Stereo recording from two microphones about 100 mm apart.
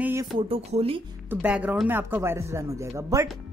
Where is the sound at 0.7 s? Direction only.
80° right.